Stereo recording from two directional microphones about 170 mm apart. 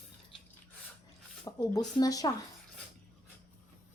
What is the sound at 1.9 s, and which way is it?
Speech, 20° left (ahead or behind).